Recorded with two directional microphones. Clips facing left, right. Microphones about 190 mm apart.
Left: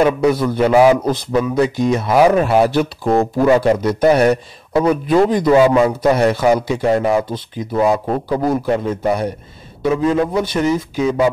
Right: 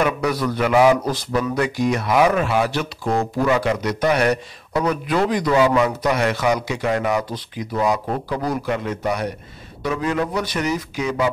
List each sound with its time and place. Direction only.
0.0 s a man's voice: 25° left (ahead or behind)